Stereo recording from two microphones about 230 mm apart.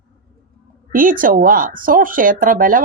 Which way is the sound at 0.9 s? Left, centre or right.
Right.